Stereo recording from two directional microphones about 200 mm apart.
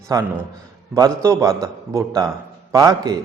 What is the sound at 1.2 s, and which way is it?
A man's voice, 15° right (ahead or behind).